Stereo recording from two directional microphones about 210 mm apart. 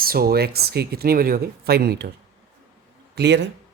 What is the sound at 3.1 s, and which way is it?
Speech, 55° right (ahead or behind).